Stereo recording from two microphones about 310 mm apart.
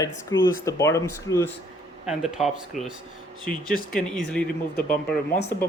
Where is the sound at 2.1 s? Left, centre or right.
Centre.